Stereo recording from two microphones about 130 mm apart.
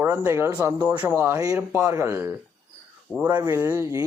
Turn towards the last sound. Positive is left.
turn(degrees=-20)  # may be behind; listen again after turning